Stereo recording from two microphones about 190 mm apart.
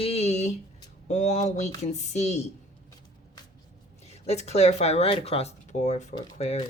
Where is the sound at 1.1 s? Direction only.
35° left (ahead or behind).